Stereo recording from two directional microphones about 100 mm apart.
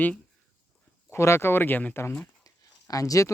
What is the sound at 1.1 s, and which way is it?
Speech, 25° left (ahead or behind).